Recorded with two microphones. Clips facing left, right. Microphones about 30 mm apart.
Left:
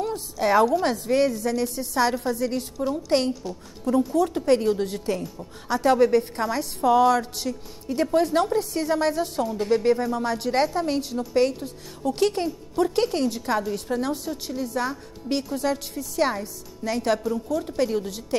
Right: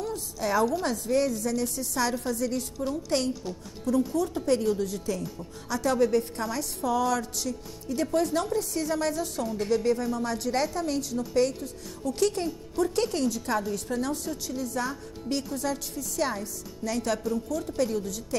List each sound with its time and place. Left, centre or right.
0.0 s a sound: left
0.8 s a woman's voice: left
3.8 s a woman's voice: left